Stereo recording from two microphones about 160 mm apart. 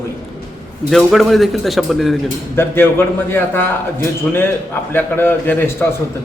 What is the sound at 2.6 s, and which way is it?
A man's voice, 15° left (ahead or behind).